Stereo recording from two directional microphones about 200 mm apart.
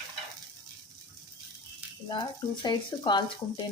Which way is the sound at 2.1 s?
20° left (ahead or behind).